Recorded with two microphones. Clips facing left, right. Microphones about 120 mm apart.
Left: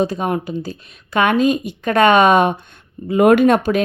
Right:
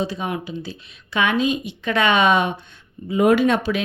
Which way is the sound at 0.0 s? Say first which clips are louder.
Left 6 dB; 50° left (ahead or behind).